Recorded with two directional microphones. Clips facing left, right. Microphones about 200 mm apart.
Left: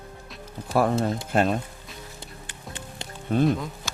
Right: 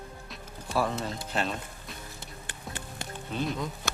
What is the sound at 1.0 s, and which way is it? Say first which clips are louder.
Speech: left 9 dB; 55° left (ahead or behind).